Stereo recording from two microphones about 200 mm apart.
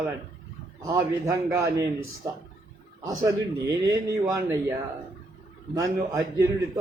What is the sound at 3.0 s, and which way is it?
A man's voice, 15° right (ahead or behind).